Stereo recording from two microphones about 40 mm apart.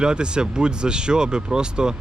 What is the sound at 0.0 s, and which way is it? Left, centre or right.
Speech, right.